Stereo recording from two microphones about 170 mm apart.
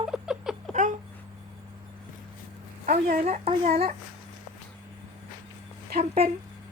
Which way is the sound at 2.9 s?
50° right (ahead or behind).